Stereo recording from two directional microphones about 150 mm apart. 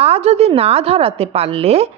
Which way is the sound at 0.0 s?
40° right (ahead or behind).